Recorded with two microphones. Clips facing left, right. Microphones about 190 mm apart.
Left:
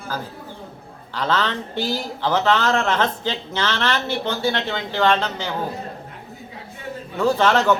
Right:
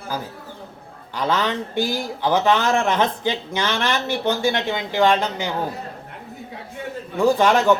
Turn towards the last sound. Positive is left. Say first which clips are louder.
# right 1 dB
turn(degrees=-15)  # may be behind; listen again after turning